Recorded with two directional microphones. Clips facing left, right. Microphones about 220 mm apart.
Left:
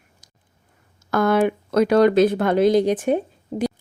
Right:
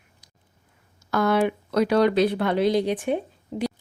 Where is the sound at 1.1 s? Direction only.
50° left (ahead or behind).